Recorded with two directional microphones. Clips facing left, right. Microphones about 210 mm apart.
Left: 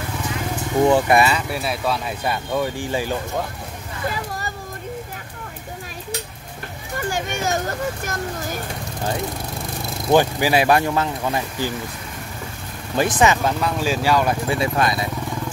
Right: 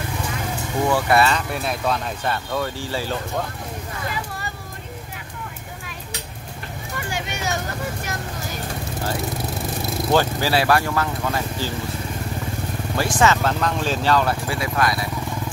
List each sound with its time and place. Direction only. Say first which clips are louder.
0.8 s speech: left 2 dB; 20° left (ahead or behind)
7.0 s a sound: left 5 dB; 45° left (ahead or behind)
10.1 s speech: left 3 dB; 15° left (ahead or behind)
12.9 s speech: left 2 dB; 20° left (ahead or behind)